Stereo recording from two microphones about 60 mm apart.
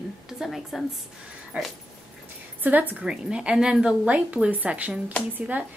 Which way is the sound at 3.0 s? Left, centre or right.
Centre.